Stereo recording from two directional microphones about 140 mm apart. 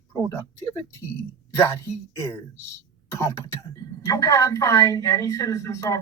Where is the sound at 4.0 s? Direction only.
25° left (ahead or behind).